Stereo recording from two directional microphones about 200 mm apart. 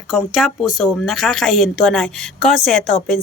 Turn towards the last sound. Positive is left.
turn(degrees=0)  # may be behind; listen again after turning